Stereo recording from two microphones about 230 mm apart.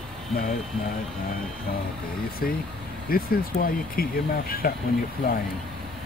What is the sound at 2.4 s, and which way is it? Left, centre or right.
Speech, left.